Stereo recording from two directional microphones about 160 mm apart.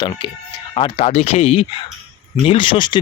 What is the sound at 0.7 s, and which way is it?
Chopping, 35° left (ahead or behind).